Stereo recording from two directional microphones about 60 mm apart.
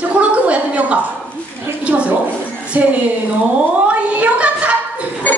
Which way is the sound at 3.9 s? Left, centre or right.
Right.